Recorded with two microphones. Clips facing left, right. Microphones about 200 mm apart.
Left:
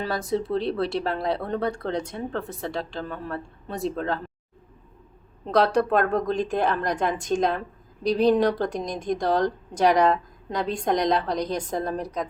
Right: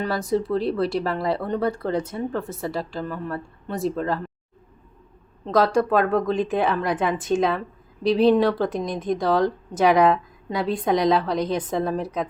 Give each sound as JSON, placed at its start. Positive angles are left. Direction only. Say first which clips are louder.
{"t": 0.0, "sound": "speech", "louder": "right 3 dB", "side_deg": 0}
{"t": 5.5, "sound": "speech", "louder": "right 1 dB", "side_deg": 0}
{"t": 8.0, "sound": "a woman's voice", "louder": "right 3 dB", "side_deg": 40}
{"t": 8.6, "sound": "speech", "louder": "right 3 dB", "side_deg": -5}